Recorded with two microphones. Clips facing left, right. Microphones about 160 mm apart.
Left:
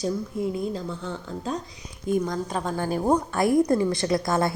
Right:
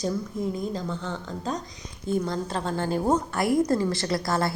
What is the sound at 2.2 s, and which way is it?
A woman's voice, 15° left (ahead or behind).